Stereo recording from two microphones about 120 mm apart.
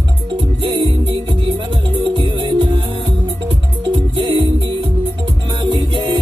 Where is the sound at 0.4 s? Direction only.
40° right (ahead or behind).